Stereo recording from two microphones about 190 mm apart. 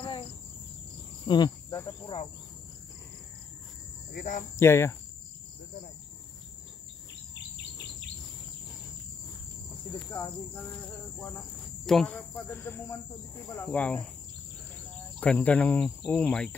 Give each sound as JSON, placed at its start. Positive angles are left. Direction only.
{"t": 0.0, "sound": "cricket", "side_deg": 25}
{"t": 4.1, "sound": "speech", "side_deg": 40}
{"t": 4.6, "sound": "speech", "side_deg": 15}
{"t": 10.0, "sound": "speech", "side_deg": 20}
{"t": 11.2, "sound": "speech", "side_deg": 5}
{"t": 15.1, "sound": "speech", "side_deg": 5}